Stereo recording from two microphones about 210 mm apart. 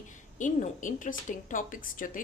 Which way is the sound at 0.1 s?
35° left (ahead or behind).